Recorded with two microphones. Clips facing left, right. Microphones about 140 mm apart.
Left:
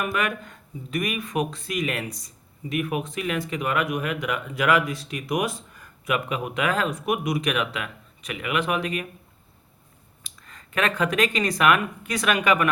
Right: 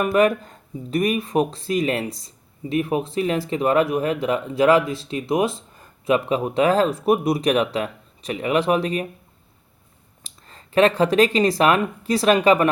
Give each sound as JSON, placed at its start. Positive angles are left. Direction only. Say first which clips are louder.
{"t": 0.0, "sound": "speech", "louder": "right 9 dB", "side_deg": -35}
{"t": 10.2, "sound": "speech", "louder": "right 2 dB", "side_deg": -30}